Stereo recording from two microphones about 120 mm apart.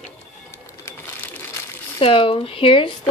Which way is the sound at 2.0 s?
50° left (ahead or behind).